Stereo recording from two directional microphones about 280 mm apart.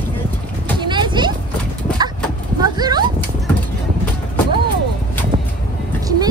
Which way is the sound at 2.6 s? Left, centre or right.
Centre.